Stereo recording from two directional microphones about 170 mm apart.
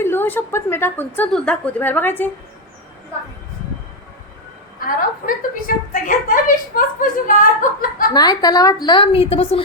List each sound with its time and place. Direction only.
0.0 s a woman's voice: 15° left (ahead or behind)
4.9 s speech: 55° left (ahead or behind)
8.1 s a woman's voice: 25° left (ahead or behind)